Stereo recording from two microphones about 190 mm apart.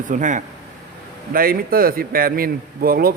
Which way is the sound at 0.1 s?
40° right (ahead or behind).